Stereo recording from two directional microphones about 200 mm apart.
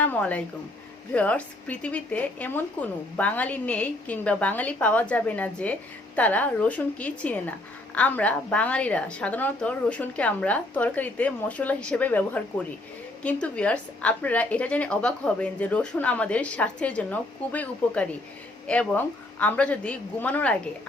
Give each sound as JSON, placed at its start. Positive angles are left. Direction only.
{"t": 0.0, "sound": "a woman's voice", "side_deg": 5}